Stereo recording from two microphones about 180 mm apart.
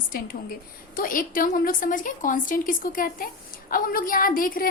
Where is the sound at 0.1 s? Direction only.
50° left (ahead or behind).